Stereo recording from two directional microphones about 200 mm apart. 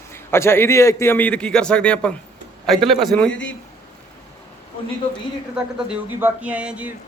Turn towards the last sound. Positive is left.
turn(degrees=-5)  # may be behind; listen again after turning